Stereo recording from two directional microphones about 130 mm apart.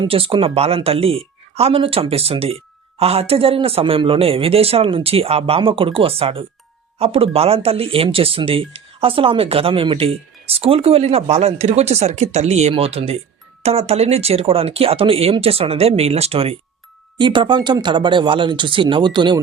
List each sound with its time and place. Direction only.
0.0 s speech: 45° right (ahead or behind)
17.2 s speech: 40° right (ahead or behind)